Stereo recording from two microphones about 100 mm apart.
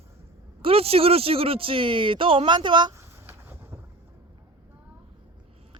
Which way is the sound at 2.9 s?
25° right (ahead or behind).